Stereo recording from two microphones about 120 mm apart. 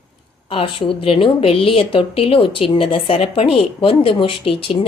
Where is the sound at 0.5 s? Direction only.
45° left (ahead or behind).